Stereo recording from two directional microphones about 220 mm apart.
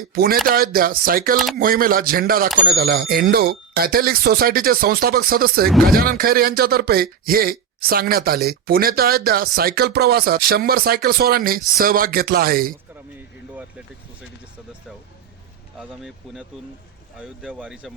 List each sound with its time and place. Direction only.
0.1 s speech: 45° right (ahead or behind)
13.6 s speech: 5° right (ahead or behind)
15.8 s speech: centre (ahead or behind)